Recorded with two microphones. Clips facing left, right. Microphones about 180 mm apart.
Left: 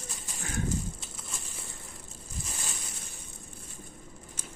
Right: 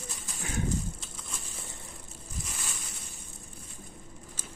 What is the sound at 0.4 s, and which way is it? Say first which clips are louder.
Pigeon: right 1 dB; 20° right (ahead or behind).